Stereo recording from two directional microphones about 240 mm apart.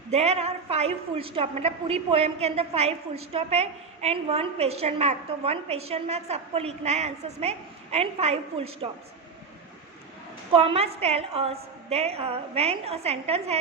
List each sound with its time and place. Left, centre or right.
0.1 s a woman's voice: right
10.5 s a woman's voice: right